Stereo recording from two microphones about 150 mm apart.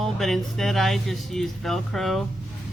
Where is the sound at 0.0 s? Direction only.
Centre (ahead or behind).